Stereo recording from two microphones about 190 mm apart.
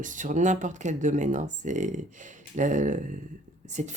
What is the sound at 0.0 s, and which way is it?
Speech, 40° right (ahead or behind).